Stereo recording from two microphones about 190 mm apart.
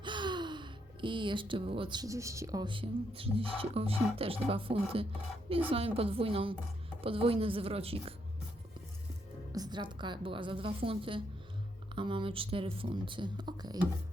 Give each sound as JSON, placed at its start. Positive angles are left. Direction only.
{"t": 0.0, "sound": "speech", "side_deg": -25}
{"t": 9.5, "sound": "speech", "side_deg": -20}